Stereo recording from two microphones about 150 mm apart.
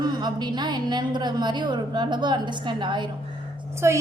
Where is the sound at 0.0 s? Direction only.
30° right (ahead or behind).